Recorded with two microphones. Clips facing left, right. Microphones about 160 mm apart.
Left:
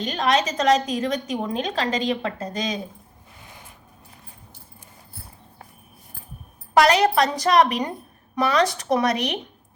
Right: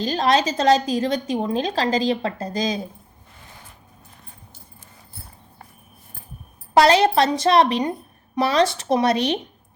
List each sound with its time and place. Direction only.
0.0 s a woman's voice: 35° right (ahead or behind)
6.7 s a woman's voice: 30° right (ahead or behind)